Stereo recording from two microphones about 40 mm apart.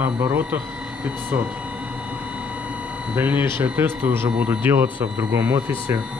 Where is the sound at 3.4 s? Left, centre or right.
Right.